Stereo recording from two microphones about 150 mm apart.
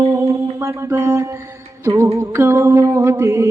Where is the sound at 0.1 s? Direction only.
20° right (ahead or behind).